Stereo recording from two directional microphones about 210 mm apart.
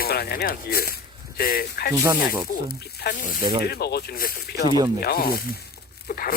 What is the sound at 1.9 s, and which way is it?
Speech, 15° right (ahead or behind).